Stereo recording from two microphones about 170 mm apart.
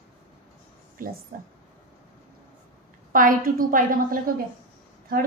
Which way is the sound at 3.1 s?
55° right (ahead or behind).